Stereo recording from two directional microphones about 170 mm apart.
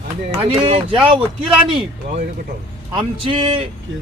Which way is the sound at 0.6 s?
35° right (ahead or behind).